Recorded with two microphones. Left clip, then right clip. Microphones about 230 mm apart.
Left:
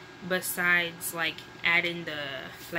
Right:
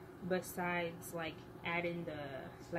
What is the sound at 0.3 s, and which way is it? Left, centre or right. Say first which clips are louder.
Speech: left 13 dB; left.